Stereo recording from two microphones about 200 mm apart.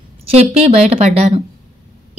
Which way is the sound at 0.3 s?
30° right (ahead or behind).